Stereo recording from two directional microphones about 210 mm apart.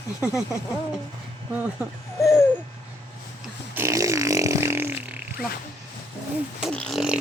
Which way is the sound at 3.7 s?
15° right (ahead or behind).